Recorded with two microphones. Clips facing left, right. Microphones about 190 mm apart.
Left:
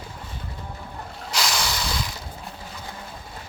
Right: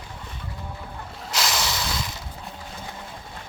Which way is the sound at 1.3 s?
Centre (ahead or behind).